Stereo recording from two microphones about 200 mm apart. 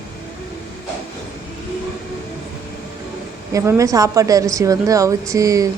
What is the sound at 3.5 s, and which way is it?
A woman's voice, 15° right (ahead or behind).